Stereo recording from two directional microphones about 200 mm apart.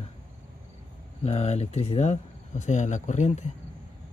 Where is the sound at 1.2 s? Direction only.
35° left (ahead or behind).